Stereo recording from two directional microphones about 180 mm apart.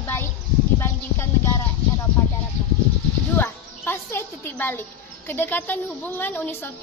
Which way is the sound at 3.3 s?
10° left (ahead or behind).